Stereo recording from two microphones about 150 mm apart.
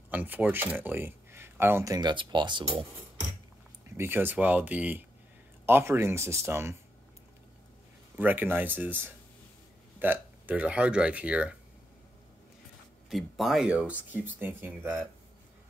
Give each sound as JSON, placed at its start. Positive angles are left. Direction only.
{"t": 0.1, "sound": "speech", "side_deg": -10}
{"t": 2.0, "sound": "speech", "side_deg": -30}
{"t": 3.9, "sound": "speech", "side_deg": -15}
{"t": 8.2, "sound": "speech", "side_deg": -10}
{"t": 13.1, "sound": "speech", "side_deg": 0}